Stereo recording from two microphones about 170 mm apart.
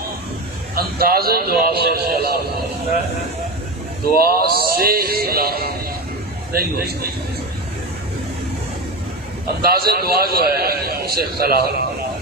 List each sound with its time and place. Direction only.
0.8 s a man's voice: 65° right (ahead or behind)
4.1 s a man's voice: 60° right (ahead or behind)
9.6 s a man's voice: 65° right (ahead or behind)